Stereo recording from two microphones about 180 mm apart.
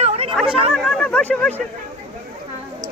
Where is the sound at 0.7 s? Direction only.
Centre (ahead or behind).